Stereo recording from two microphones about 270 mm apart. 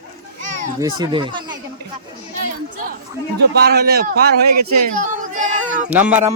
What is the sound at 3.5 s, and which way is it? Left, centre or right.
Speech, right.